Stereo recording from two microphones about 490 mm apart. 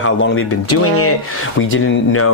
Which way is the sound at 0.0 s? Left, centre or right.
Left.